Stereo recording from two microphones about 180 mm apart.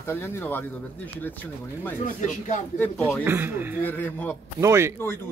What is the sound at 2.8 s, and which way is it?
Speech, 5° left (ahead or behind).